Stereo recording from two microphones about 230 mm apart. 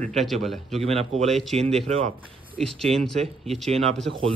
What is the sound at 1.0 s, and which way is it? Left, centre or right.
Speech, right.